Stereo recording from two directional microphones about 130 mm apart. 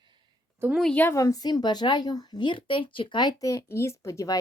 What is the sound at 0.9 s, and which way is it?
Speech, 15° left (ahead or behind).